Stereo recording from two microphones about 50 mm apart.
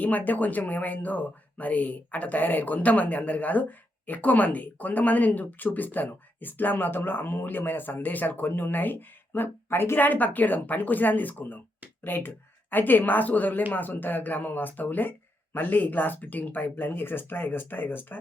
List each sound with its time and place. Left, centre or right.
0.0 s speech: left